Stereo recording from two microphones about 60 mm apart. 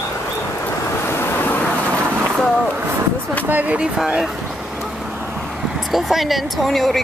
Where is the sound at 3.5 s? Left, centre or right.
Right.